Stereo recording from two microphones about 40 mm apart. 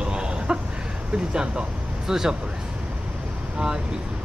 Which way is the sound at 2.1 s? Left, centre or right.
Centre.